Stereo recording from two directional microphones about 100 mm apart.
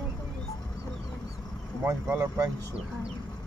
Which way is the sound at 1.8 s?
25° right (ahead or behind).